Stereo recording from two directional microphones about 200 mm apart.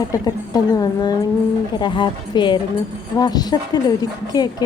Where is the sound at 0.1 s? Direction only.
20° left (ahead or behind).